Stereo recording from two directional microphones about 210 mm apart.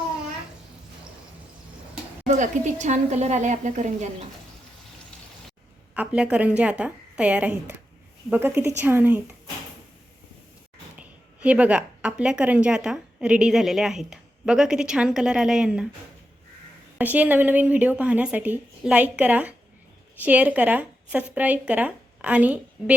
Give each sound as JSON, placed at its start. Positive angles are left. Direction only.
{"t": 2.2, "sound": "a woman's voice", "side_deg": -35}
{"t": 5.9, "sound": "a woman's voice", "side_deg": -5}
{"t": 10.9, "sound": "a woman's voice", "side_deg": -5}
{"t": 17.0, "sound": "a woman's voice", "side_deg": -10}